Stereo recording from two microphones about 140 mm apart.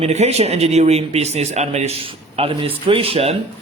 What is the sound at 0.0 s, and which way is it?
A man's voice, 50° right (ahead or behind).